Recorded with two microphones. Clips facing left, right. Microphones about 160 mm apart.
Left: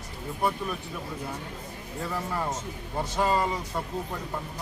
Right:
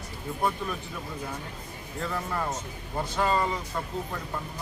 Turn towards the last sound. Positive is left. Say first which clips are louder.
# left 1 dB
turn(degrees=15)  # may be behind; listen again after turning